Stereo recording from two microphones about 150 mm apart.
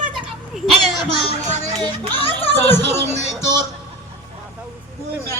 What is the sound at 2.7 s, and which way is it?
Speech, 15° left (ahead or behind).